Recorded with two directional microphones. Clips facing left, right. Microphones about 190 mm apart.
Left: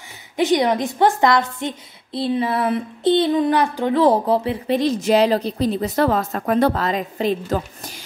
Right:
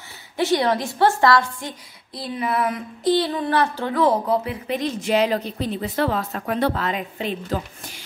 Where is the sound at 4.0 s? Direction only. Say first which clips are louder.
Left 2 dB; 30° left (ahead or behind).